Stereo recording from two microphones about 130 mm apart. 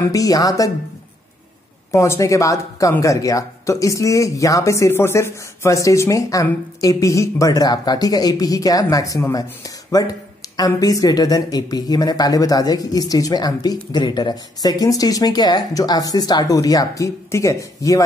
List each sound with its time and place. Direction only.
0.1 s speech: 25° left (ahead or behind)
1.9 s speech: 25° left (ahead or behind)